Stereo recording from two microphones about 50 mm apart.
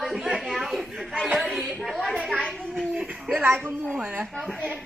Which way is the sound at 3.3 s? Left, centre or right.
Centre.